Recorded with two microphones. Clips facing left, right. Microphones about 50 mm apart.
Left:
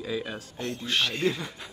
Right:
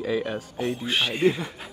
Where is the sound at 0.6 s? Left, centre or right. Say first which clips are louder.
Right 2 dB; centre.